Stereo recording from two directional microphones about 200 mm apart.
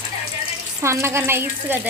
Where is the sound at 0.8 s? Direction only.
15° right (ahead or behind).